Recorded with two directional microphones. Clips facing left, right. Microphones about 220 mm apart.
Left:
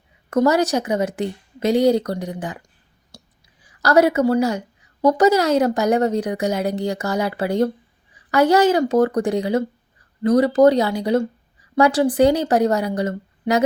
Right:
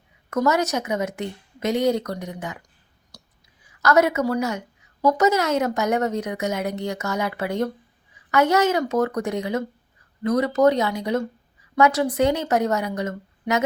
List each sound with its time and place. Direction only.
0.3 s a woman's voice: 30° left (ahead or behind)
3.1 s whispering: 25° left (ahead or behind)
3.8 s a woman's voice: 30° left (ahead or behind)